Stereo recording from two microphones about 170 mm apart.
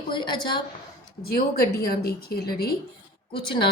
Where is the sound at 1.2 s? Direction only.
60° left (ahead or behind).